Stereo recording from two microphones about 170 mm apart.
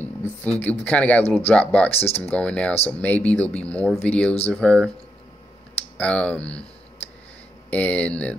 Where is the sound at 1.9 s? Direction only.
35° left (ahead or behind).